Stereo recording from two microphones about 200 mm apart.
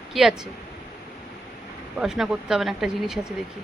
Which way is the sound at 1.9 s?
Centre (ahead or behind).